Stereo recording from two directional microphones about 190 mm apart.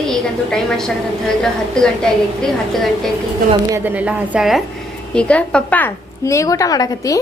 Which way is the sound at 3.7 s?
10° right (ahead or behind).